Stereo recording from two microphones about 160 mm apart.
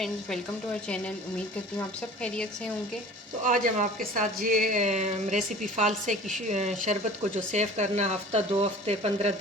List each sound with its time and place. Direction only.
0.0 s a woman's voice: 5° left (ahead or behind)
2.2 s a woman's voice: 5° left (ahead or behind)
3.4 s a woman's voice: 55° right (ahead or behind)